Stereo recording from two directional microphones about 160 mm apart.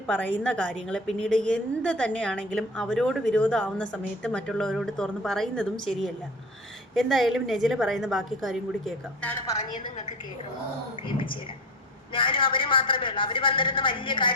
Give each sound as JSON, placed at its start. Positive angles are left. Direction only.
{"t": 0.1, "sound": "a woman's voice", "side_deg": 10}
{"t": 9.5, "sound": "a woman's voice", "side_deg": 25}
{"t": 12.1, "sound": "a woman's voice", "side_deg": 30}